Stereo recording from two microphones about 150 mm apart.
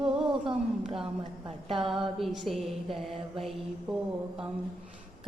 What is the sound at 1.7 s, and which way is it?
Speech, 35° right (ahead or behind).